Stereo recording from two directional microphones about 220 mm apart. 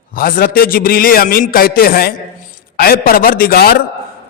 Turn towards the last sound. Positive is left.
turn(degrees=40)  # may be behind; listen again after turning